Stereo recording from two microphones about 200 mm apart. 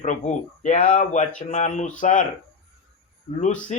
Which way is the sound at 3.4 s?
40° left (ahead or behind).